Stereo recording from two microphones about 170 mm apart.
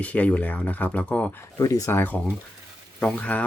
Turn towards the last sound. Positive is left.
turn(degrees=5)  # may be behind; listen again after turning